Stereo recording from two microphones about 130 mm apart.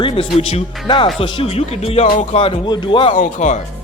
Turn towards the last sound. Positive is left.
turn(degrees=65)  # may be behind; listen again after turning